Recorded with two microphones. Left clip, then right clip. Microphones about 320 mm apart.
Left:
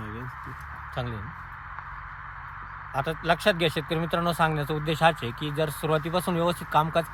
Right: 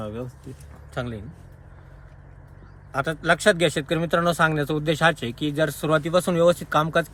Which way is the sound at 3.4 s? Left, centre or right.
Left.